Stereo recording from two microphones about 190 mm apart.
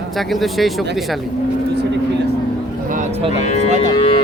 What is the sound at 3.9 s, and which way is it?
Music, 25° left (ahead or behind).